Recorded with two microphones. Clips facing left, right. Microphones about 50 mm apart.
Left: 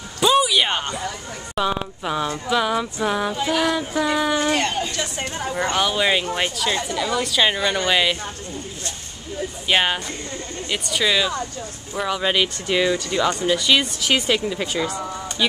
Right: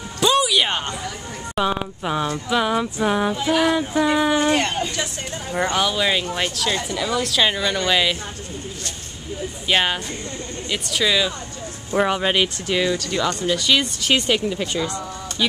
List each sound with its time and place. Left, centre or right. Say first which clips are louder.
0.2 s music: left 1 dB; centre
1.5 s speech: right 1 dB; centre
5.8 s speech: left 2 dB; centre
9.7 s speech: even; centre
11.9 s speech: right 5 dB; right
12.2 s speech: right 1 dB; centre
12.6 s speech: left 1 dB; centre